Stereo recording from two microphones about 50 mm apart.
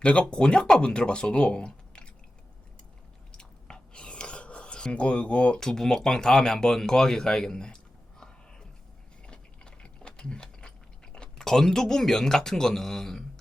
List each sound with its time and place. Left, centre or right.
0.0 s speech: left
3.3 s chewing: centre
5.5 s speech: centre
9.2 s gears: centre